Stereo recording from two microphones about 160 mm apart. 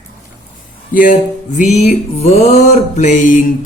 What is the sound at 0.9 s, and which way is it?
Music, 55° left (ahead or behind).